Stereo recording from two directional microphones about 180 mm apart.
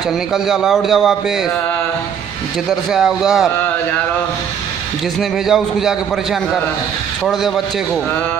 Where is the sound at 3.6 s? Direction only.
10° left (ahead or behind).